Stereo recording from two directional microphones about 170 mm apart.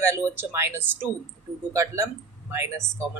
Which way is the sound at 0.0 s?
15° right (ahead or behind).